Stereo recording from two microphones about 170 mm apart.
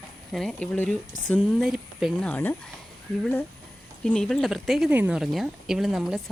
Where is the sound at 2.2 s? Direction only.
10° left (ahead or behind).